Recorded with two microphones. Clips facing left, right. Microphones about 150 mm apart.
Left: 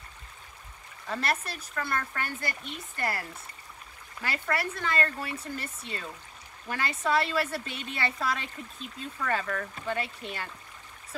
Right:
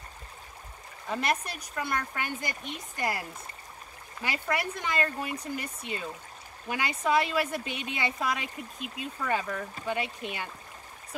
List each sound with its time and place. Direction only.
1.0 s speech: 15° right (ahead or behind)